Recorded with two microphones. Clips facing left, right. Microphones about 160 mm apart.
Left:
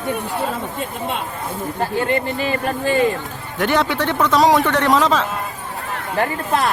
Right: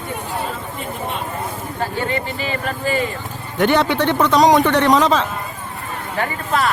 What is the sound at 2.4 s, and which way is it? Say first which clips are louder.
Speech: left 3 dB; 55° left (ahead or behind).